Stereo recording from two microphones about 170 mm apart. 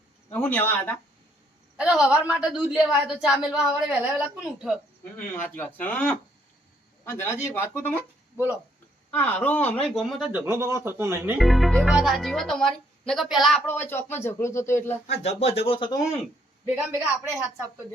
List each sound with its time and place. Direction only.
0.3 s speech: 10° left (ahead or behind)
1.7 s a woman's voice: 5° right (ahead or behind)
5.1 s speech: 10° left (ahead or behind)
9.0 s speech: 10° left (ahead or behind); by 11.3 s 15° right (ahead or behind)
11.3 s a woman's voice: centre (ahead or behind)
13.7 s speech: 15° left (ahead or behind)
15.0 s speech: 40° left (ahead or behind)
16.6 s speech: 10° right (ahead or behind)